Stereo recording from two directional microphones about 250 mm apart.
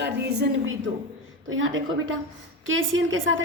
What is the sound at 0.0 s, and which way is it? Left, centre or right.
A woman's voice, right.